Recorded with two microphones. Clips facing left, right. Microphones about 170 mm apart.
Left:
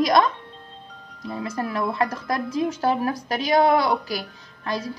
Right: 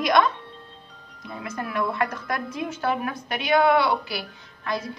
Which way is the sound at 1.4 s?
35° left (ahead or behind).